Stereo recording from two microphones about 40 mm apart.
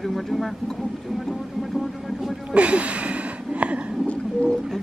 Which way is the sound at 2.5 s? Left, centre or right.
Right.